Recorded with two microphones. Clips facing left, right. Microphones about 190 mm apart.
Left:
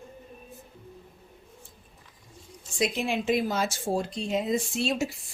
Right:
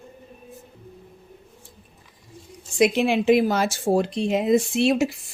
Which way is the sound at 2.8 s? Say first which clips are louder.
Right 8 dB; 75° right (ahead or behind).